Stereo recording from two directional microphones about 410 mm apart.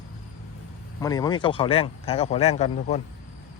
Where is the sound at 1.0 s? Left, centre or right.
Centre.